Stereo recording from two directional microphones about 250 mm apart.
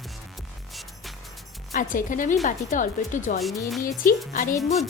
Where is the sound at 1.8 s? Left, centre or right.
Left.